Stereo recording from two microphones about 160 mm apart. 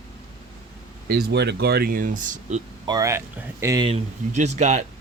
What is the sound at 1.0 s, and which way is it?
Speech, 75° right (ahead or behind).